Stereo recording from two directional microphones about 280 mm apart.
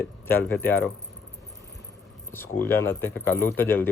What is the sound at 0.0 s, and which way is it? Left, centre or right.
Speech, centre.